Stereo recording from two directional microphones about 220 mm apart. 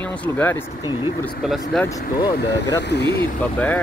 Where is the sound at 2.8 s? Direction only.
50° left (ahead or behind).